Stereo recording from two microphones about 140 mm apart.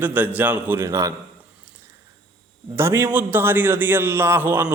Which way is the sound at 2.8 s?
20° right (ahead or behind).